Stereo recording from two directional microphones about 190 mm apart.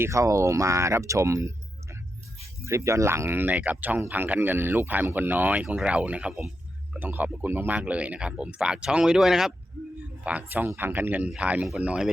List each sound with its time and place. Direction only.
0.0 s speech: 15° right (ahead or behind)